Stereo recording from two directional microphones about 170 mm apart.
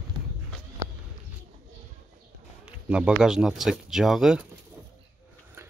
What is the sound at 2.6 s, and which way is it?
Speech, 5° right (ahead or behind).